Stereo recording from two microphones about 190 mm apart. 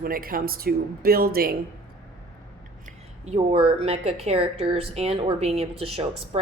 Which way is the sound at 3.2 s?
35° right (ahead or behind).